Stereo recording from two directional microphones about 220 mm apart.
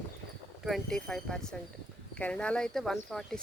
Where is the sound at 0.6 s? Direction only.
Centre (ahead or behind).